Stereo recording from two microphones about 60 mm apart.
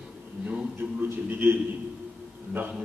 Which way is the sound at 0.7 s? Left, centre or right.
Right.